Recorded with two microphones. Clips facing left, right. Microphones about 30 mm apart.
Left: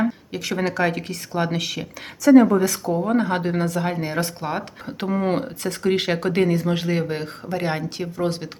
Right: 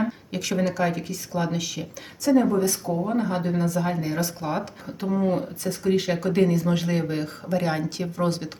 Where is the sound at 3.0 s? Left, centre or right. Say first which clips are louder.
Left 4 dB; left.